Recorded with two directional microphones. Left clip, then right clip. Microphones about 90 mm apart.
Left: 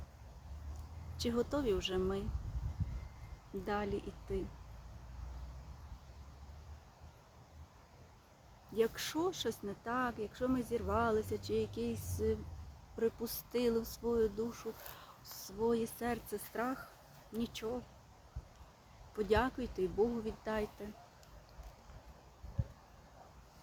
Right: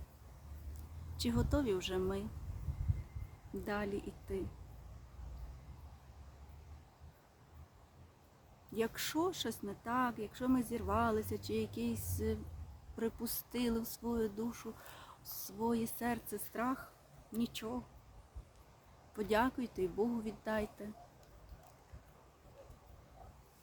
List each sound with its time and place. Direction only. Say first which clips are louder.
1.1 s speech: left 1 dB; 25° right (ahead or behind)
3.7 s speech: left 2 dB; 20° right (ahead or behind)
8.7 s speech: left 3 dB; 20° right (ahead or behind)
13.0 s speech: left 4 dB; 20° right (ahead or behind)
19.1 s speech: left 1 dB; 20° right (ahead or behind)